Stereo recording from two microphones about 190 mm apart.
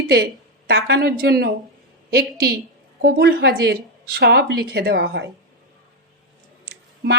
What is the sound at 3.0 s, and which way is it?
A woman's voice, 50° right (ahead or behind).